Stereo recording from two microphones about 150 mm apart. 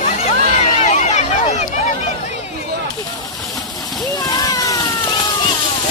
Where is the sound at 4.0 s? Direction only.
25° left (ahead or behind).